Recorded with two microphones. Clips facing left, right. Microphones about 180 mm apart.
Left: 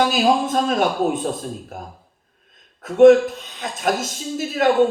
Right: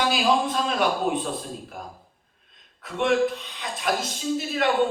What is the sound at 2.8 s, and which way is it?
Speech, 45° left (ahead or behind).